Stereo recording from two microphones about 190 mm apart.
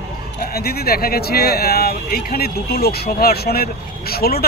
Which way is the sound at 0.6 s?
55° left (ahead or behind).